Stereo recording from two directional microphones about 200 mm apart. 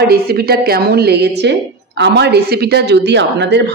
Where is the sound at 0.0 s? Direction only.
50° right (ahead or behind).